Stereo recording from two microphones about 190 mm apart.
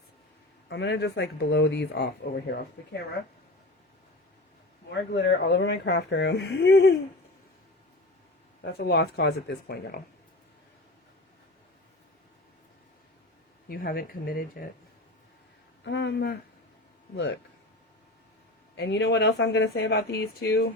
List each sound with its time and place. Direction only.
0.7 s speech: 65° left (ahead or behind)
5.1 s speech: 65° left (ahead or behind)
8.6 s speech: 60° left (ahead or behind)
13.7 s speech: 50° left (ahead or behind)
15.8 s speech: 65° left (ahead or behind)
18.8 s speech: 70° left (ahead or behind)